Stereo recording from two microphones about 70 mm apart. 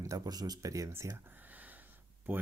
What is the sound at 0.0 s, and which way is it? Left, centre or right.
Speech, right.